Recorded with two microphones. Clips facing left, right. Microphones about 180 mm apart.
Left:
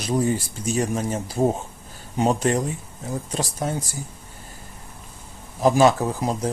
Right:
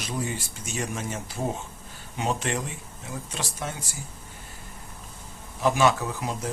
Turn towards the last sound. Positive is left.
turn(degrees=40)  # may be behind; listen again after turning